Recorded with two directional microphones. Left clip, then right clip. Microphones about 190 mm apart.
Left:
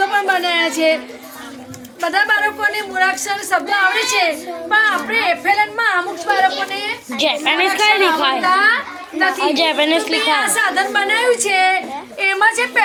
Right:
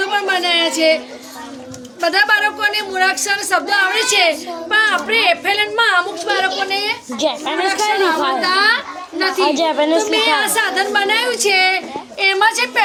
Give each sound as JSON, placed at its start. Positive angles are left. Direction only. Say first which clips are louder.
{"t": 0.0, "sound": "a sound", "louder": "left 1 dB", "side_deg": 5}
{"t": 2.0, "sound": "a woman's voice", "louder": "right 2 dB", "side_deg": -5}
{"t": 6.7, "sound": "a woman's voice", "louder": "right 3 dB", "side_deg": -10}